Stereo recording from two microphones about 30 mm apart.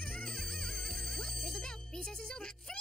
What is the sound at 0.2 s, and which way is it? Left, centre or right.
Music, left.